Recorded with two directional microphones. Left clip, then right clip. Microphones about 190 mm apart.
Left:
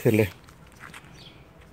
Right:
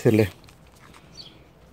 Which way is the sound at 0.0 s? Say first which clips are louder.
Right 2 dB; 25° right (ahead or behind).